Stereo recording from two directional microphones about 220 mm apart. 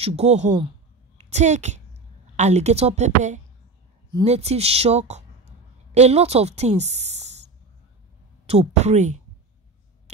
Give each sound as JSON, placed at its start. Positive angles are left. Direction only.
{"t": 0.0, "sound": "a woman's voice", "side_deg": -30}
{"t": 8.5, "sound": "a woman's voice", "side_deg": -30}